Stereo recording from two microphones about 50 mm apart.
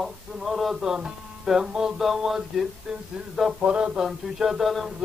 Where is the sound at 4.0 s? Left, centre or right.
Centre.